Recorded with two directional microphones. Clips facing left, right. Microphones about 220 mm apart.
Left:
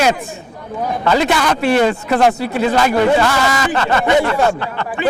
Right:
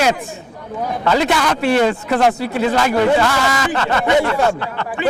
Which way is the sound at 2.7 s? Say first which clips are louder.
Left 1 dB; 20° left (ahead or behind).